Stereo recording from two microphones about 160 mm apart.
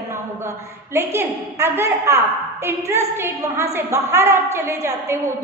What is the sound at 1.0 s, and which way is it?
A woman's voice, 15° right (ahead or behind).